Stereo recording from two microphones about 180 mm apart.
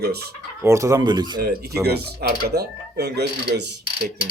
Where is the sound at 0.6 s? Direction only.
15° right (ahead or behind).